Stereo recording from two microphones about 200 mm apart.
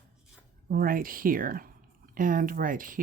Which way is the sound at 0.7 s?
50° right (ahead or behind).